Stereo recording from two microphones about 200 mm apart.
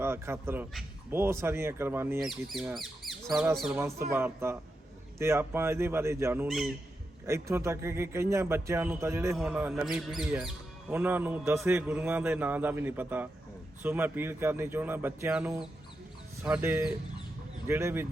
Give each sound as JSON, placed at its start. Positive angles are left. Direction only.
{"t": 0.0, "sound": "speech", "side_deg": -10}
{"t": 3.8, "sound": "speech", "side_deg": -15}